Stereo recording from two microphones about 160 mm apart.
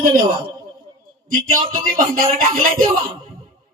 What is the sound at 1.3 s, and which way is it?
A man's voice, 60° right (ahead or behind).